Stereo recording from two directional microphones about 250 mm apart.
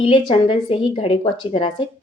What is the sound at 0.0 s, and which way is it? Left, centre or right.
Speech, centre.